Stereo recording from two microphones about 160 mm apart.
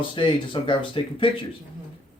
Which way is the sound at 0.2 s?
30° left (ahead or behind).